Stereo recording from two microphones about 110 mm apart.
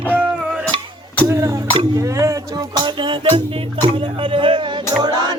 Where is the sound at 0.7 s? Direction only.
45° right (ahead or behind).